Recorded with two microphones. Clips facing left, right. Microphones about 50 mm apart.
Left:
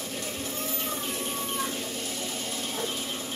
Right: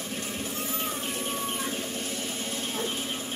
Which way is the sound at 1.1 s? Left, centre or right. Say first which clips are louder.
Even; right.